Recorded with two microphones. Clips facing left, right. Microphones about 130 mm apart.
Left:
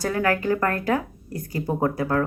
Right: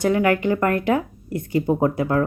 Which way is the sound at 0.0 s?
20° right (ahead or behind).